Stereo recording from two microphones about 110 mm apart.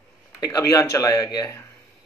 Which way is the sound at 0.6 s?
35° left (ahead or behind).